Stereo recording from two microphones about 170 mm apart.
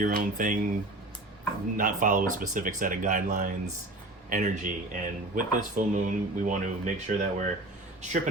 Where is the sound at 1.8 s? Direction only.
50° right (ahead or behind).